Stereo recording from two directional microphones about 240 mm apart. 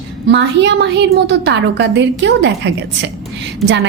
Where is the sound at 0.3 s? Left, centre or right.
Right.